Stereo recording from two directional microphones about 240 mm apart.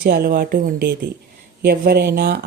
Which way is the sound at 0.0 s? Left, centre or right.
Right.